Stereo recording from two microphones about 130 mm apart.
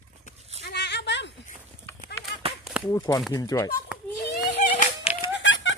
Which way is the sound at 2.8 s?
30° left (ahead or behind).